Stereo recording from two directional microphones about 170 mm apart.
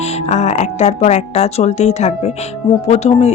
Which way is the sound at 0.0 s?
40° left (ahead or behind).